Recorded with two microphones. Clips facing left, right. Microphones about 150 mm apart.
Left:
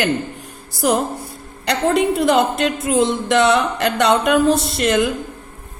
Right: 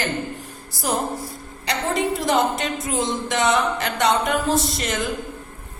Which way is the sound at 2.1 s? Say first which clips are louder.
Left 5 dB; 65° left (ahead or behind).